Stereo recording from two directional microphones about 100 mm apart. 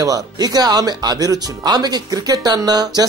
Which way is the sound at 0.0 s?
40° right (ahead or behind).